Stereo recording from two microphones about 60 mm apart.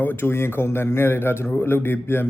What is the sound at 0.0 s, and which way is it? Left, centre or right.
A man's voice, left.